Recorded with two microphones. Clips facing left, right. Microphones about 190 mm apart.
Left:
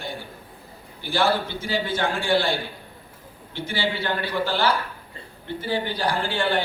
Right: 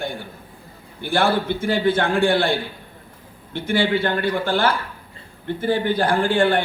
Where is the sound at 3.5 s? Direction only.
55° right (ahead or behind).